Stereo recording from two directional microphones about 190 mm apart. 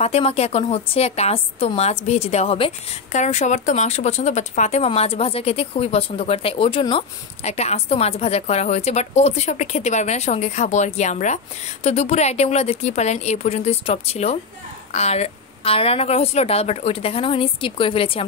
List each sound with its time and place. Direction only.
0.0 s a woman's voice: 35° left (ahead or behind)